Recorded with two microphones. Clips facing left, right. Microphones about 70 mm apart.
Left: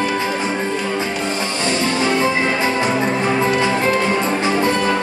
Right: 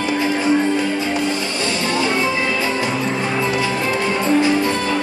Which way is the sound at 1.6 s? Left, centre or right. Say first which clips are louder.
Left 2 dB; left.